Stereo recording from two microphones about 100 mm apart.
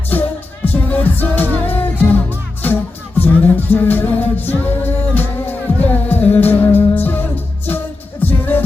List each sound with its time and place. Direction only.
0.1 s music: 20° left (ahead or behind)